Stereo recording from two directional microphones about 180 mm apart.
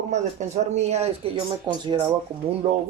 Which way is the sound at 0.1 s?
40° right (ahead or behind).